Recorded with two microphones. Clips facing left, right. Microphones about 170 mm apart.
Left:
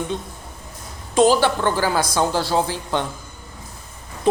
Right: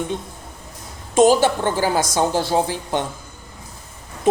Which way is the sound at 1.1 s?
50° right (ahead or behind).